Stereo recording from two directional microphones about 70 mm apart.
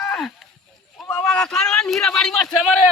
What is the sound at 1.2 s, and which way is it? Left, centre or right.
Speech, centre.